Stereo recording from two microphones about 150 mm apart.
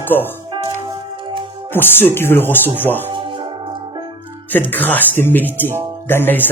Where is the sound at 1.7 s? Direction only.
15° left (ahead or behind).